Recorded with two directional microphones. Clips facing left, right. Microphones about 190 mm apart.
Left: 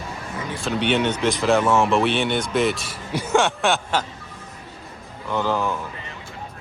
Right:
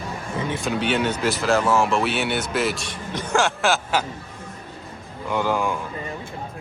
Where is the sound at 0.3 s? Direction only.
20° right (ahead or behind).